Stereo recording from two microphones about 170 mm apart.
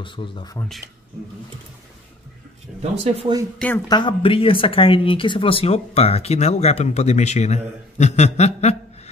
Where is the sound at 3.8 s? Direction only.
25° left (ahead or behind).